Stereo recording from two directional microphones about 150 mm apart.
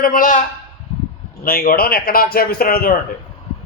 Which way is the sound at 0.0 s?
65° left (ahead or behind).